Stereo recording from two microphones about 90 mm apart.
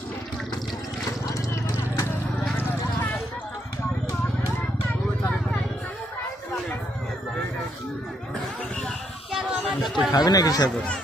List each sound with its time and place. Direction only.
1.3 s a sound: 35° left (ahead or behind)
2.6 s clip-clop: 20° left (ahead or behind)
9.3 s music: centre (ahead or behind)
10.1 s speech: 45° left (ahead or behind)